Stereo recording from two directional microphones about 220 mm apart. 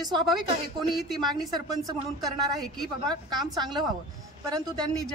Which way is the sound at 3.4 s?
20° right (ahead or behind).